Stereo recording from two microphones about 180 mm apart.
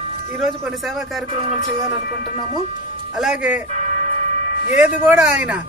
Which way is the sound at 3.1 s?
5° right (ahead or behind).